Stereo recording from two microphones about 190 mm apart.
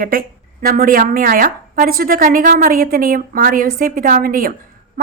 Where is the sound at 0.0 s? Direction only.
50° right (ahead or behind).